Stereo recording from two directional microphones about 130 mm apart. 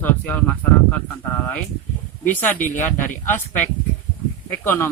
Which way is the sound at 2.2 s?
15° left (ahead or behind).